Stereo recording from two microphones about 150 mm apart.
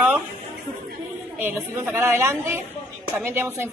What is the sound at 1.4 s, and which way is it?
Speech, 15° right (ahead or behind).